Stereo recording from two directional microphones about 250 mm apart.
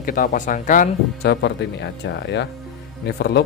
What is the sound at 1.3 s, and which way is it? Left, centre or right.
Speech, left.